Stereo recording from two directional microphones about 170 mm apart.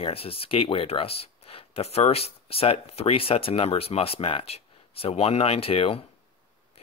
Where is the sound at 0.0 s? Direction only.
35° left (ahead or behind).